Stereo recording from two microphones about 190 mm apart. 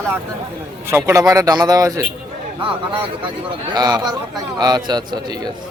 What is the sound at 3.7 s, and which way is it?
A man's voice, 20° right (ahead or behind).